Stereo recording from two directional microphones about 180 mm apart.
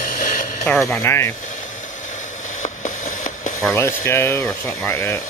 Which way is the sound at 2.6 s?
45° left (ahead or behind).